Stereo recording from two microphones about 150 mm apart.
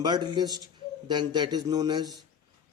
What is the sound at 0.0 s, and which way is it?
A man's voice, 30° right (ahead or behind).